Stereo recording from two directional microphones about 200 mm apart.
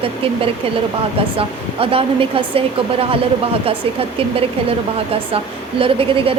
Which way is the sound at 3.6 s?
30° right (ahead or behind).